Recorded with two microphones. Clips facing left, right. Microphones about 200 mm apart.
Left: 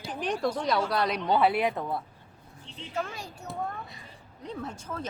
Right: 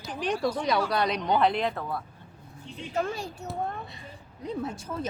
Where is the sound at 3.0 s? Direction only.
30° right (ahead or behind).